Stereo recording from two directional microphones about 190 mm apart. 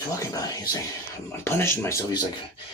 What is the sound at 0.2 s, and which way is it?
Speech, 20° left (ahead or behind).